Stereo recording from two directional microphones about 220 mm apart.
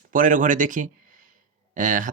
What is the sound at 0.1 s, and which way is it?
Speech, 35° right (ahead or behind).